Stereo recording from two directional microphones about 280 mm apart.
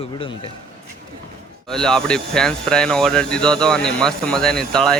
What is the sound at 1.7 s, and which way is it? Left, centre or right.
Speech, centre.